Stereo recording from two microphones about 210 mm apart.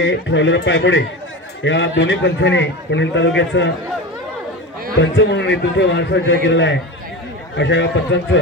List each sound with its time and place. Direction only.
0.0 s a man's voice: 60° left (ahead or behind)
5.0 s a man's voice: 55° left (ahead or behind)